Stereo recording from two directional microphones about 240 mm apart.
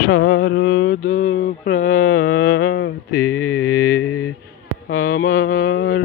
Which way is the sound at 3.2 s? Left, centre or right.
Centre.